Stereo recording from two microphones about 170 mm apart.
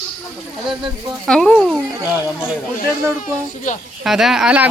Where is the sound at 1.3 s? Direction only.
5° left (ahead or behind).